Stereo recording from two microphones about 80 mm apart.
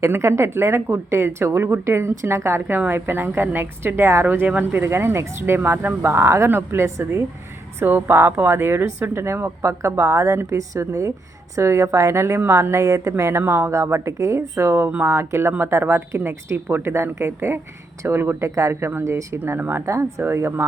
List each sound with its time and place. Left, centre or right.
0.0 s a woman's voice: right
13.4 s a woman's voice: right
19.8 s a woman's voice: right